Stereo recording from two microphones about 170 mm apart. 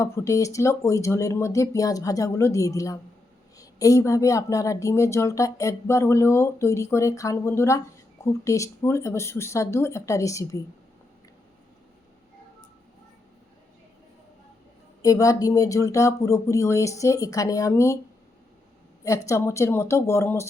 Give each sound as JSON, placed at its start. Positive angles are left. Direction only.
{"t": 0.0, "sound": "speech", "side_deg": 20}
{"t": 15.0, "sound": "speech", "side_deg": 20}
{"t": 19.0, "sound": "speech", "side_deg": 20}